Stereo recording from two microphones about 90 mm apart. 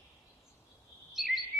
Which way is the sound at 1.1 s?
Centre (ahead or behind).